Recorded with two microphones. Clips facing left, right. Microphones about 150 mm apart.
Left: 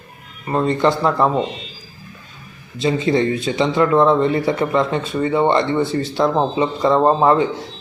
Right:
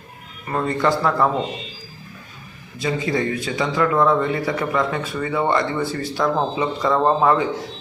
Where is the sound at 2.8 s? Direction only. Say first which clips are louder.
Left 5 dB; 25° left (ahead or behind).